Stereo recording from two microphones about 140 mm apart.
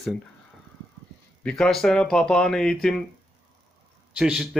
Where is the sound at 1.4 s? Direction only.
5° left (ahead or behind).